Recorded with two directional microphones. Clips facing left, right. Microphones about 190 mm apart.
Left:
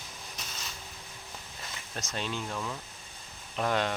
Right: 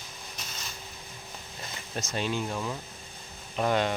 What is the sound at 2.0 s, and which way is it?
Speech, 5° right (ahead or behind).